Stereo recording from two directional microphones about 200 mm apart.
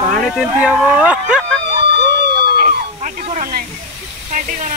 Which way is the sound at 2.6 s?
45° right (ahead or behind).